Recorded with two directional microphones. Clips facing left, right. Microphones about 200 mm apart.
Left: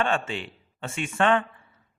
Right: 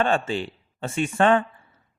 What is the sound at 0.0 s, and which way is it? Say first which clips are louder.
A man's voice: right 4 dB; 35° right (ahead or behind).